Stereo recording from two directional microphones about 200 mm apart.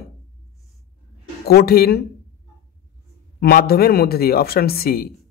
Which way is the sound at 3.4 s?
50° left (ahead or behind).